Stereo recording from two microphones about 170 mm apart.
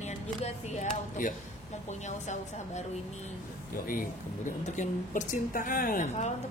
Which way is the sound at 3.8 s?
50° left (ahead or behind).